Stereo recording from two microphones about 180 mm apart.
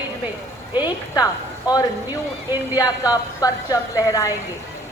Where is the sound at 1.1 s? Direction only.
20° left (ahead or behind).